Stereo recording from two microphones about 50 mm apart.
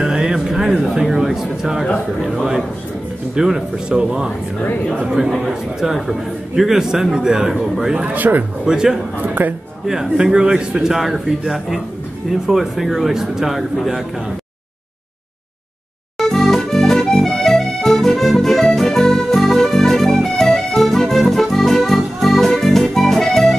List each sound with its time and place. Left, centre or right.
0.0 s music: centre
1.0 s a sound: centre
2.2 s a man's voice: centre
8.1 s speech: right
8.6 s a man's voice: centre
9.2 s speech: right
9.8 s a man's voice: centre
11.0 s speech: centre
16.2 s accordion: centre